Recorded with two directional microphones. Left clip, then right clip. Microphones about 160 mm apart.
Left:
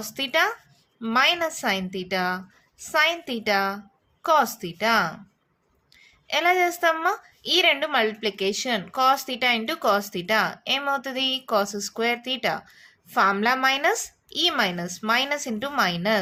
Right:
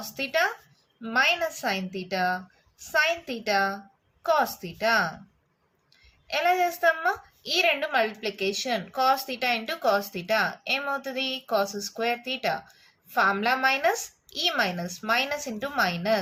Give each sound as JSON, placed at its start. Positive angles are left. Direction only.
{"t": 0.2, "sound": "a woman's voice", "side_deg": 45}
{"t": 6.2, "sound": "a woman's voice", "side_deg": 45}